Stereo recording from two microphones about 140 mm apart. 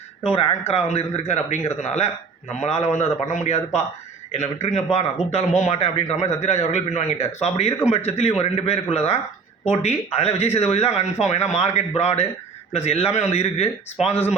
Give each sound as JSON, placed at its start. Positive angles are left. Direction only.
{"t": 0.7, "sound": "speech", "side_deg": 50}